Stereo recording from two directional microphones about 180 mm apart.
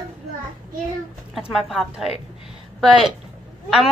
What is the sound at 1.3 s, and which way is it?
A woman's voice, centre (ahead or behind).